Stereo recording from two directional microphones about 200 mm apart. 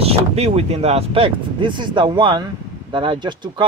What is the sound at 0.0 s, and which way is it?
Speech, 30° right (ahead or behind).